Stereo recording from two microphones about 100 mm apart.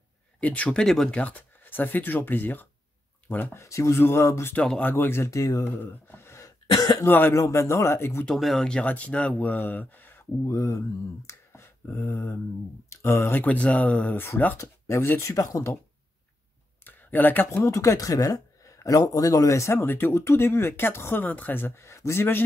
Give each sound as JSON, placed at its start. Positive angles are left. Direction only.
{"t": 0.4, "sound": "speech", "side_deg": 10}
{"t": 3.6, "sound": "speech", "side_deg": 30}
{"t": 4.6, "sound": "speech", "side_deg": 15}
{"t": 4.9, "sound": "speech", "side_deg": 25}
{"t": 5.7, "sound": "cough", "side_deg": 20}
{"t": 7.1, "sound": "speech", "side_deg": 20}
{"t": 7.3, "sound": "speech", "side_deg": 30}
{"t": 8.3, "sound": "speech", "side_deg": 0}
{"t": 10.4, "sound": "speech", "side_deg": 30}
{"t": 11.2, "sound": "a sound", "side_deg": 25}
{"t": 12.9, "sound": "speech", "side_deg": 30}
{"t": 16.8, "sound": "a sound", "side_deg": 20}
{"t": 17.6, "sound": "speech", "side_deg": 35}